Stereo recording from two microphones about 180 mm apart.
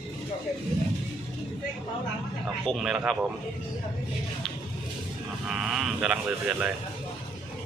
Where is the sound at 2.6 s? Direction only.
Centre (ahead or behind).